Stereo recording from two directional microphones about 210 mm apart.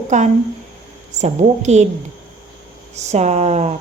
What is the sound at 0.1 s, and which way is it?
Speech, 35° right (ahead or behind).